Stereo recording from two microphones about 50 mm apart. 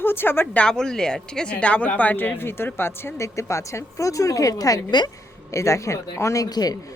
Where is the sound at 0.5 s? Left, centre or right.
Centre; by 2.9 s left.